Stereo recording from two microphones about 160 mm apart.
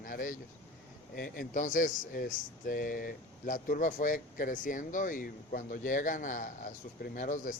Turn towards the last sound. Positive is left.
turn(degrees=55)  # may be behind; listen again after turning